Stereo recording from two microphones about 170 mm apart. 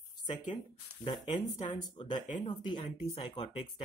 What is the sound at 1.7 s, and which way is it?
Speech, 30° left (ahead or behind).